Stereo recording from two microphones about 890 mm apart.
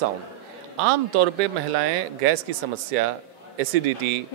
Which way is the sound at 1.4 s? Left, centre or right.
Right.